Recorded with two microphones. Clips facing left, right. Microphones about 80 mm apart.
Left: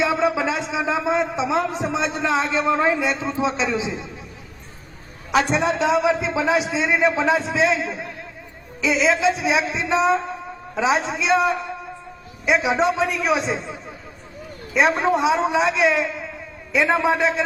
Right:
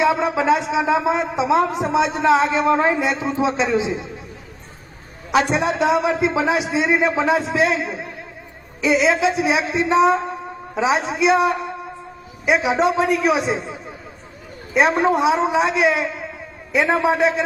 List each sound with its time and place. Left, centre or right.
0.0 s a man's voice: centre
5.5 s a man's voice: centre
12.5 s a man's voice: centre
13.0 s a man's voice: right
13.2 s a man's voice: centre
14.8 s a man's voice: centre
15.7 s a man's voice: centre